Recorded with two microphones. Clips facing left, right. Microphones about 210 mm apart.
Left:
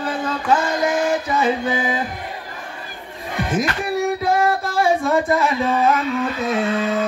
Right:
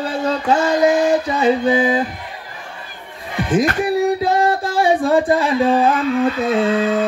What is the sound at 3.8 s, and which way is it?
Music, 25° right (ahead or behind).